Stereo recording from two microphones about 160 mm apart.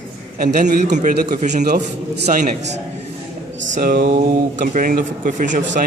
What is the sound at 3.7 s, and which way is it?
Speech, 60° right (ahead or behind).